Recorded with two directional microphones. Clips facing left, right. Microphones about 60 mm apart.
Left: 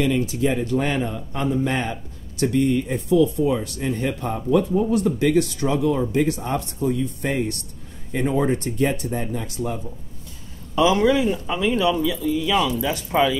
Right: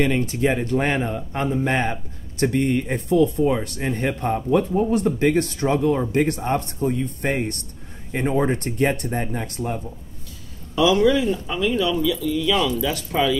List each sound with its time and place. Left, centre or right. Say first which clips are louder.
0.0 s a man's voice: right 1 dB; right
10.8 s speech: even; left
11.1 s speech: even; centre